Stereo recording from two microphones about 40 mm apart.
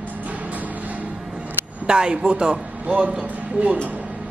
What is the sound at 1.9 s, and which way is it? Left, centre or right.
Speech, right.